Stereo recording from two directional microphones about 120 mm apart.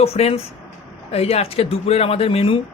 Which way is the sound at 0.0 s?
60° left (ahead or behind).